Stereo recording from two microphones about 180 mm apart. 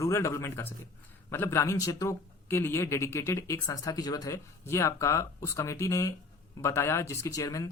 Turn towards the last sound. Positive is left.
turn(degrees=20)  # may be behind; listen again after turning